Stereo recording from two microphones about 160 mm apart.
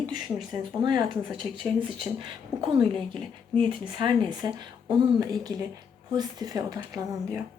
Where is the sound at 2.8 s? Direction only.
Centre (ahead or behind).